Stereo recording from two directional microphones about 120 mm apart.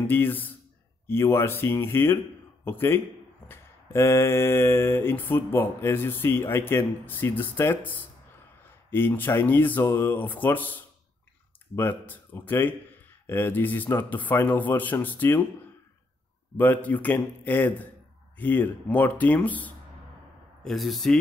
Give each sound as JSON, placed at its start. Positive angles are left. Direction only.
{"t": 0.0, "sound": "speech", "side_deg": 15}
{"t": 16.5, "sound": "speech", "side_deg": 15}
{"t": 20.6, "sound": "speech", "side_deg": 0}